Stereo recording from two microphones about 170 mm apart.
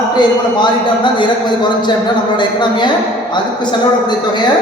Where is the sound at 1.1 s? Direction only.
25° left (ahead or behind).